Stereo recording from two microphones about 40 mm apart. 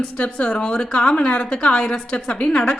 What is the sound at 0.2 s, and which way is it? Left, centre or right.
A woman's voice, left.